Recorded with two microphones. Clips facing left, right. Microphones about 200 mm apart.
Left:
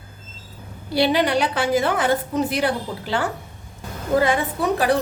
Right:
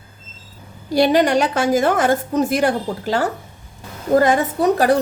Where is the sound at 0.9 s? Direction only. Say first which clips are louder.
Right 4 dB; 45° right (ahead or behind).